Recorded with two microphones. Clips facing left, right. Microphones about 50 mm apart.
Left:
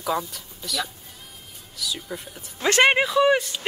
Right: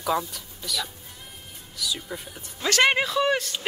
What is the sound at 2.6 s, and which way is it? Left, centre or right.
Speech, left.